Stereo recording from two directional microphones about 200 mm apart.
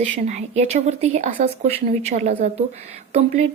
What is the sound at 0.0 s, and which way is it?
Speech, 35° right (ahead or behind).